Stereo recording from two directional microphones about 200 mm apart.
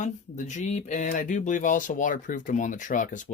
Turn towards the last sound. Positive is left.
turn(degrees=40)  # may be behind; listen again after turning